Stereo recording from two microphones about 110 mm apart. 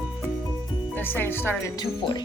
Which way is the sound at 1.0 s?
20° left (ahead or behind).